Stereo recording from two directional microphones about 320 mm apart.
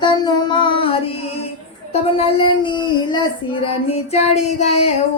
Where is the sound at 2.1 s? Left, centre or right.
Centre.